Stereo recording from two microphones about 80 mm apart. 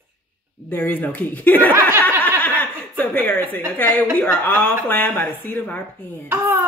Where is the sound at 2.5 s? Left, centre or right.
Centre.